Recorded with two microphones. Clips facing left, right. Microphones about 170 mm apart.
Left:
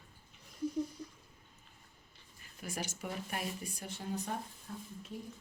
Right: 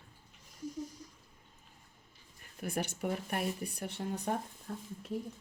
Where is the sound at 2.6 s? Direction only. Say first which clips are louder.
Right 5 dB; 60° right (ahead or behind).